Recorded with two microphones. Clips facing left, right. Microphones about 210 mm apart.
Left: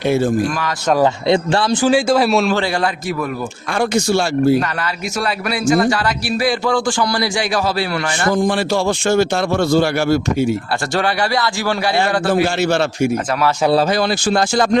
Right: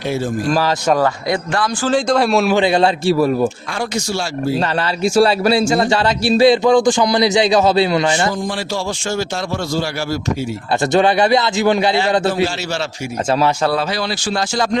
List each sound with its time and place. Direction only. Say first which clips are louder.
1.8 s speech: left 1 dB; 10° left (ahead or behind)
2.6 s speech: right 5 dB; 20° right (ahead or behind)
3.8 s speech: left 6 dB; 55° left (ahead or behind)
5.0 s speech: right 11 dB; 30° right (ahead or behind)
8.3 s speech: left 6 dB; 55° left (ahead or behind)
10.9 s speech: right 5 dB; 20° right (ahead or behind)
14.3 s speech: left 2 dB; 50° left (ahead or behind)